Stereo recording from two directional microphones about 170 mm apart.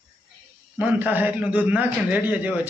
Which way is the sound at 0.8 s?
10° right (ahead or behind).